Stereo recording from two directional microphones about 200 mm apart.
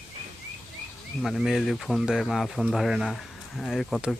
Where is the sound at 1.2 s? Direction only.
Centre (ahead or behind).